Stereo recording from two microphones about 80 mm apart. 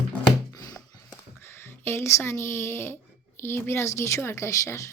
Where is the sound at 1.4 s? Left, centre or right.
Left.